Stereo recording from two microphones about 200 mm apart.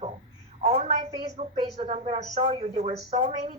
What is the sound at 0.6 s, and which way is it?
A woman's voice, 35° right (ahead or behind).